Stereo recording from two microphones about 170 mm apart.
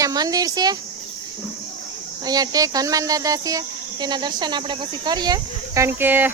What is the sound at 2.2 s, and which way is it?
Speech, 20° right (ahead or behind).